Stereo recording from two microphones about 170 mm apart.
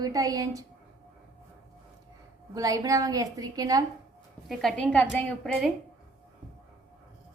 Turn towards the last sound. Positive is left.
turn(degrees=5)  # may be behind; listen again after turning